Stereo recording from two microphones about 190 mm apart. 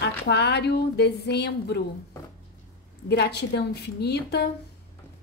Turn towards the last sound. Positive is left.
turn(degrees=60)  # may be behind; listen again after turning